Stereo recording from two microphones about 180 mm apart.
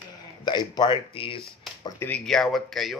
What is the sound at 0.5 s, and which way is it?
Speech, 25° left (ahead or behind).